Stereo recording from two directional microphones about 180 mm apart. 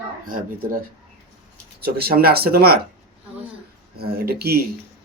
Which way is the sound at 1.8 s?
60° right (ahead or behind).